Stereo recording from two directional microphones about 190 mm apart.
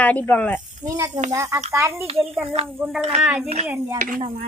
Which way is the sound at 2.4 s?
30° right (ahead or behind).